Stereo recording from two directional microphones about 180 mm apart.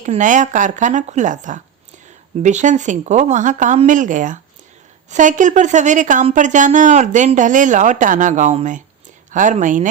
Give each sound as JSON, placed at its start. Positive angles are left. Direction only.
{"t": 0.0, "sound": "a woman's voice", "side_deg": -45}